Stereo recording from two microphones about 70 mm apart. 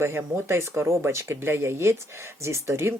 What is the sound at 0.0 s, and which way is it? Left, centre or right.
Speech, right.